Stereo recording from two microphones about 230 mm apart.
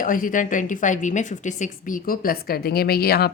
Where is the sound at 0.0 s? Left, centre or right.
Left.